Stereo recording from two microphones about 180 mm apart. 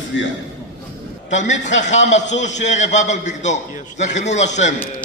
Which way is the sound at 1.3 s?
40° left (ahead or behind).